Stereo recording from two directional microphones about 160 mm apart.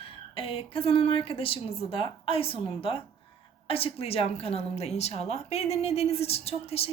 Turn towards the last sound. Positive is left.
turn(degrees=40)  # may be behind; listen again after turning